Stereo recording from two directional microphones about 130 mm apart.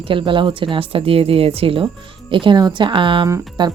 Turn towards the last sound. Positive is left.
turn(degrees=-25)  # may be behind; listen again after turning